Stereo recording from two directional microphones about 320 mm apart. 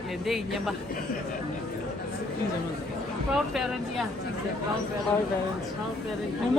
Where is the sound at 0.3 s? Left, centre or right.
Centre.